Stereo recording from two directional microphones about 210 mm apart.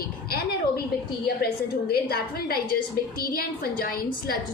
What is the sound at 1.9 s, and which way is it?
A woman's voice, 45° left (ahead or behind).